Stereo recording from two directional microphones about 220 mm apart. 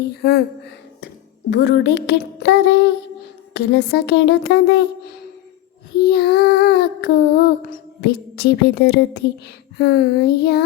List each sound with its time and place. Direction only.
0.2 s child singing: 45° left (ahead or behind)
1.0 s a sound: 50° left (ahead or behind)
3.5 s child singing: 50° left (ahead or behind)